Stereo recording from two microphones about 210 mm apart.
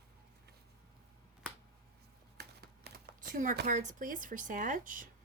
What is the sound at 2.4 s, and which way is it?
Speech, 50° right (ahead or behind).